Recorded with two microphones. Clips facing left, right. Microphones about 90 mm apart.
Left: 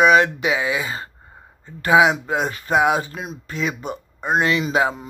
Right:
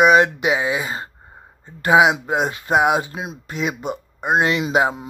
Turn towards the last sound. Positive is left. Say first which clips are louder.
# right 1 dB
turn(degrees=-15)  # may be behind; listen again after turning